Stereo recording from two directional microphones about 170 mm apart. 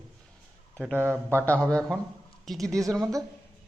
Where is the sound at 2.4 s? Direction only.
Centre (ahead or behind).